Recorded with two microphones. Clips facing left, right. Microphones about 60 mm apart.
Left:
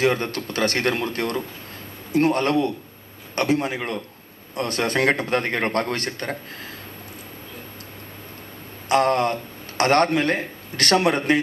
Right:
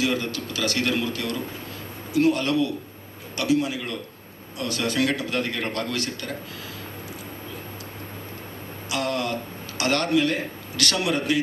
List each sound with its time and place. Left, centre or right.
0.0 s a man's voice: left
8.9 s a man's voice: left